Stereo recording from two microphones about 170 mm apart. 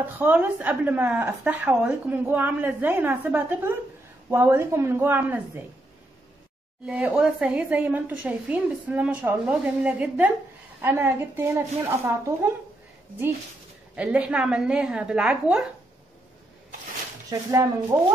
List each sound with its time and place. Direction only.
0.2 s a woman's voice: 10° right (ahead or behind)
6.9 s a woman's voice: 5° right (ahead or behind)
13.9 s a woman's voice: 5° right (ahead or behind)
17.3 s a woman's voice: 15° right (ahead or behind)